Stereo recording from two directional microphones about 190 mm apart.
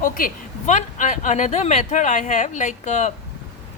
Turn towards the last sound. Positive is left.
turn(degrees=40)  # may be behind; listen again after turning